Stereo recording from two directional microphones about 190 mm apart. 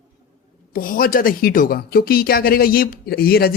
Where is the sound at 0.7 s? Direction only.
50° left (ahead or behind).